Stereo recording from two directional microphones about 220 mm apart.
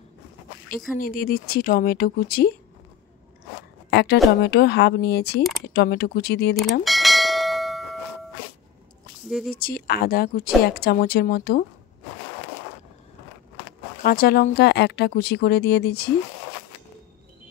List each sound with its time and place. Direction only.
0.9 s speech: 40° left (ahead or behind)
3.9 s a woman's voice: 50° left (ahead or behind)
6.8 s bell: centre (ahead or behind)
9.5 s speech: 40° left (ahead or behind)
14.0 s speech: 45° left (ahead or behind)